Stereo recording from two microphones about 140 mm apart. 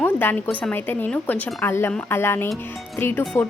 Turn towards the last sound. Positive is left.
turn(degrees=10)  # may be behind; listen again after turning